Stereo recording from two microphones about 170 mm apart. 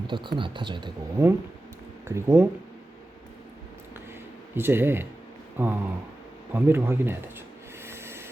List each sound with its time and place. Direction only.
0.1 s speech: 25° right (ahead or behind)
4.5 s speech: 15° right (ahead or behind)
7.9 s vehicle: 15° right (ahead or behind)